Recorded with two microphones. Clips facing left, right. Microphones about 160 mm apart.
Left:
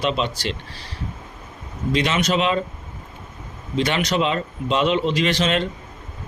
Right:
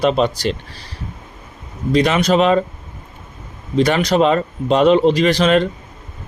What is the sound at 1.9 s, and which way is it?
Speech, 40° right (ahead or behind).